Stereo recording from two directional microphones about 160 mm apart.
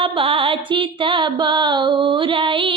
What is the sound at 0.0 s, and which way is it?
Music, 35° right (ahead or behind).